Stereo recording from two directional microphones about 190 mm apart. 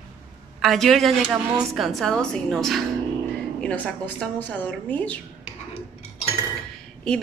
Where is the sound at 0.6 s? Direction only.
Centre (ahead or behind).